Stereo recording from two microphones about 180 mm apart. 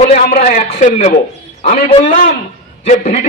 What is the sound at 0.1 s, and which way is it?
A man's voice, 40° left (ahead or behind).